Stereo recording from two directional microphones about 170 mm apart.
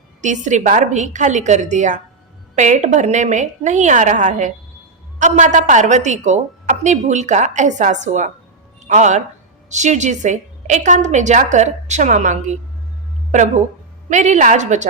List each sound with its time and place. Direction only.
0.2 s a woman's voice: 45° right (ahead or behind)